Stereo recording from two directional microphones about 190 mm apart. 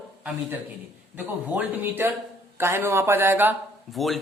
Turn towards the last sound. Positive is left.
turn(degrees=0)  # may be behind; listen again after turning